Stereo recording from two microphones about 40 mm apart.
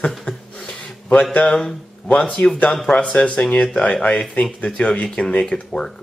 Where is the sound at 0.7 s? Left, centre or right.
Left.